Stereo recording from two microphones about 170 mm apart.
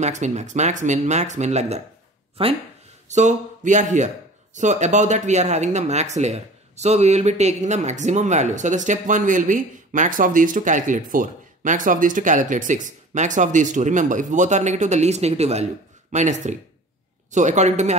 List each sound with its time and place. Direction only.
0.0 s speech: 45° right (ahead or behind)
3.1 s speech: 45° right (ahead or behind)